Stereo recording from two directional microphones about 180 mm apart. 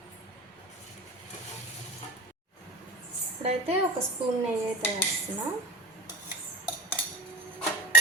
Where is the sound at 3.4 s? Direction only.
35° right (ahead or behind).